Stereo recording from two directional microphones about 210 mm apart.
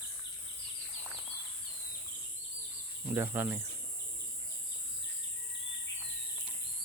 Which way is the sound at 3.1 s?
10° right (ahead or behind).